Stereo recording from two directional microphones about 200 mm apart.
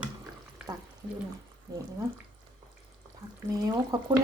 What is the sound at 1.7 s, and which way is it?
Speech, 20° right (ahead or behind).